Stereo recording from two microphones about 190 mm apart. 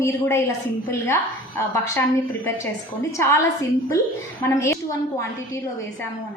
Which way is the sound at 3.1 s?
15° left (ahead or behind).